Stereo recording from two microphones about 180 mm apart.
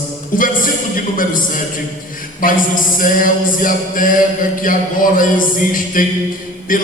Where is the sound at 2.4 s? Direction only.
50° left (ahead or behind).